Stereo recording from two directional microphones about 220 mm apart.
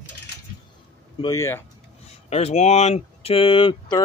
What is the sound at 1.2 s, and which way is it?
Speech, 15° left (ahead or behind).